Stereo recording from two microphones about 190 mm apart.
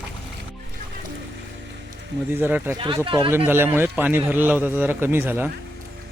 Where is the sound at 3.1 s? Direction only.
25° right (ahead or behind).